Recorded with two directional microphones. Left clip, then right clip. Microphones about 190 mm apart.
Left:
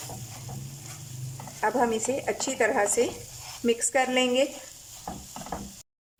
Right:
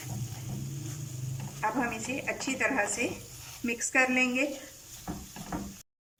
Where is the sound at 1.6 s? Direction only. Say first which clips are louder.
Left 6 dB; 35° left (ahead or behind).